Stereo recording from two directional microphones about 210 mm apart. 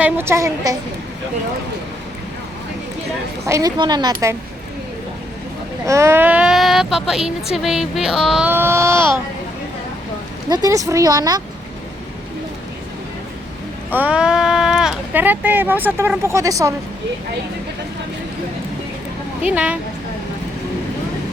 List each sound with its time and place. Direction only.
0.0 s speech: 10° right (ahead or behind)
3.4 s speech: 15° right (ahead or behind)
5.8 s speech: 15° right (ahead or behind)
10.5 s speech: 15° right (ahead or behind)
13.9 s speech: 5° right (ahead or behind)
19.4 s speech: 5° right (ahead or behind)